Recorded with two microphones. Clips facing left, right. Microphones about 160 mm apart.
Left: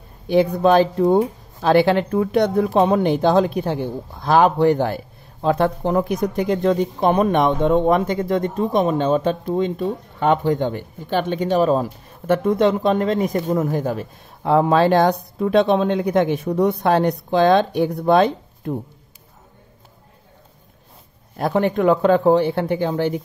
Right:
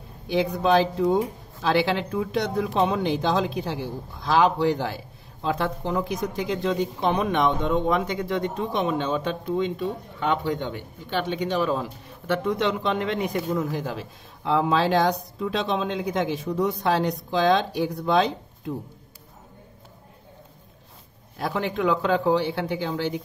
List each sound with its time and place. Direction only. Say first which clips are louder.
0.3 s speech: left 6 dB; 50° left (ahead or behind)
21.4 s speech: left 7 dB; 50° left (ahead or behind)